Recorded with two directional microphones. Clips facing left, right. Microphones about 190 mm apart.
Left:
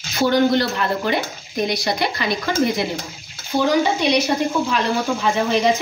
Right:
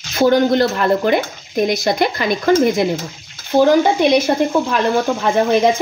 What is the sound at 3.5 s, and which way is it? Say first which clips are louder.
Speech: right 6 dB; 50° right (ahead or behind).